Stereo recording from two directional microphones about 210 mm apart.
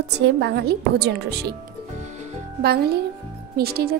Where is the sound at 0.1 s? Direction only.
55° right (ahead or behind).